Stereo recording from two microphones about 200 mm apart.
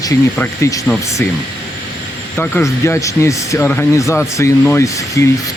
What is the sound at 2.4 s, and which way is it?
Speech, 10° left (ahead or behind).